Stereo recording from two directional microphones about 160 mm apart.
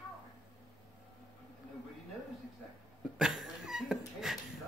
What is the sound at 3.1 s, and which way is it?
Dog, centre (ahead or behind).